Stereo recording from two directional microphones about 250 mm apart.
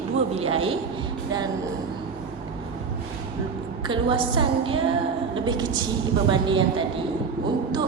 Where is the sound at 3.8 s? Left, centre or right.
Centre.